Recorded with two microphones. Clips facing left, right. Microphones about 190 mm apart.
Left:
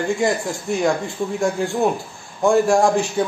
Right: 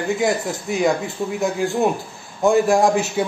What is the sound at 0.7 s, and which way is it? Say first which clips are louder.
A man's voice: even; centre (ahead or behind).